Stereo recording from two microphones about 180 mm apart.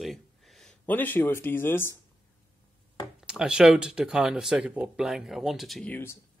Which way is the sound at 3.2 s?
5° right (ahead or behind).